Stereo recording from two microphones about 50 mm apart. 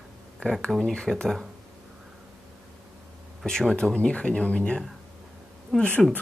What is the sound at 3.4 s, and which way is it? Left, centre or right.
Speech, centre.